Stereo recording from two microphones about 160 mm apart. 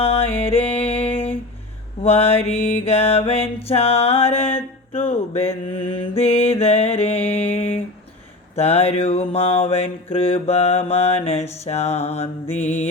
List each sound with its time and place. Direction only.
0.0 s music: 40° left (ahead or behind)